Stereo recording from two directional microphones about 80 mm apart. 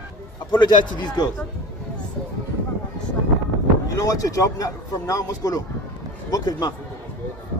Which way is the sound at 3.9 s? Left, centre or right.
Left.